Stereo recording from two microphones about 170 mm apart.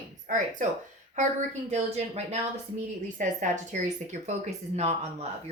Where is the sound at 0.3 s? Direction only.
50° right (ahead or behind).